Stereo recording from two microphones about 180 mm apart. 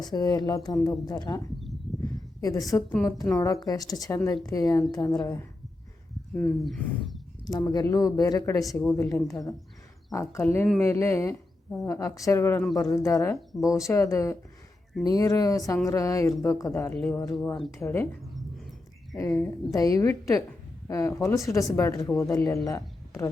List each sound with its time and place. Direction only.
0.0 s a woman's voice: 20° left (ahead or behind)
2.0 s a sound: 20° left (ahead or behind)
2.7 s speech: 10° left (ahead or behind)
3.3 s a woman's voice: 20° left (ahead or behind)
6.6 s speech: centre (ahead or behind)
7.4 s a woman's voice: 20° left (ahead or behind)
12.6 s speech: centre (ahead or behind)
12.9 s a woman's voice: 20° left (ahead or behind)
17.0 s a woman's voice: 5° left (ahead or behind)